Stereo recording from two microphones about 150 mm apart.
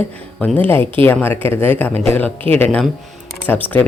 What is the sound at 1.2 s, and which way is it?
Speech, 15° left (ahead or behind).